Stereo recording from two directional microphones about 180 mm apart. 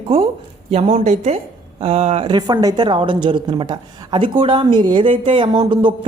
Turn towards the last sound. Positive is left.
turn(degrees=-25)  # may be behind; listen again after turning